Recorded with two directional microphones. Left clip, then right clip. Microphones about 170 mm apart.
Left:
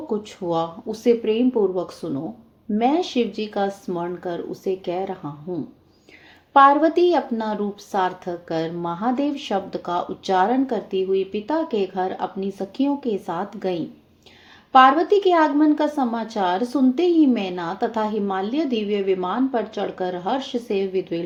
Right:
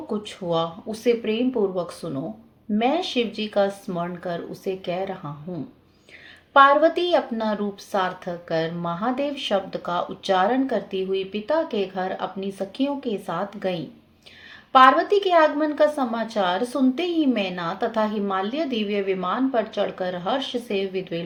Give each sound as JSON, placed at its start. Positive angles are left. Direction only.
{"t": 0.1, "sound": "a woman's voice", "side_deg": 35}
{"t": 6.5, "sound": "a woman's voice", "side_deg": 35}